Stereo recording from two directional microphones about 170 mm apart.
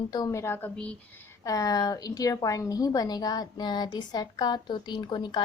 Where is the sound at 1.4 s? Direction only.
20° left (ahead or behind).